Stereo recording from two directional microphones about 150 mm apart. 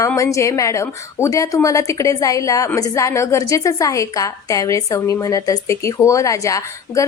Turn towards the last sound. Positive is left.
turn(degrees=20)  # may be behind; listen again after turning